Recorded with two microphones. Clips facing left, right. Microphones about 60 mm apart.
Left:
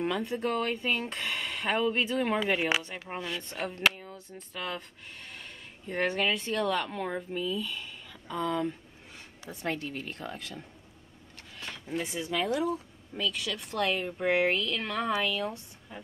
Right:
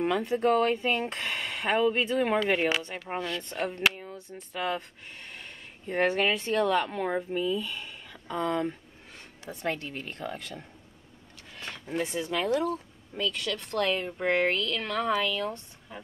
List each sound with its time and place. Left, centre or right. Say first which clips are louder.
0.0 s speech: right 5 dB; centre
8.5 s speech: right 1 dB; centre
9.5 s speech: right 1 dB; centre
11.9 s speech: right 2 dB; centre